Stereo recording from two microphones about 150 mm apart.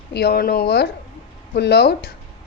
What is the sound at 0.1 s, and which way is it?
A woman's voice, 90° left.